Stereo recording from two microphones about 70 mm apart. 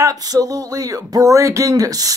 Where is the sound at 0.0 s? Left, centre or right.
Right.